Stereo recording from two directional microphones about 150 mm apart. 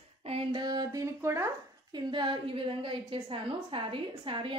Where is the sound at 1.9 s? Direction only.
30° right (ahead or behind).